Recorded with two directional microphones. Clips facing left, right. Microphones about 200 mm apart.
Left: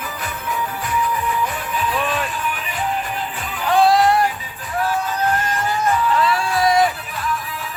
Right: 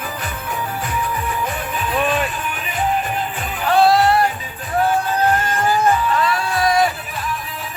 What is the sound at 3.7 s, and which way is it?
Music, 15° left (ahead or behind).